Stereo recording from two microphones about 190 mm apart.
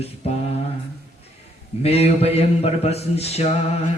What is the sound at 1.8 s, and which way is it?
Mantra, 30° left (ahead or behind).